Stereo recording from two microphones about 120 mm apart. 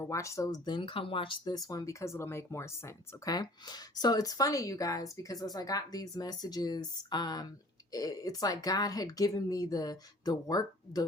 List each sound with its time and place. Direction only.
0.0 s speech: 25° left (ahead or behind); by 1.5 s 45° left (ahead or behind)
1.5 s speech: 30° left (ahead or behind)